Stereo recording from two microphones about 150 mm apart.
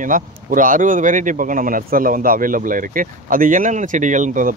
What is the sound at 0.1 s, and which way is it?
Speech, 65° right (ahead or behind).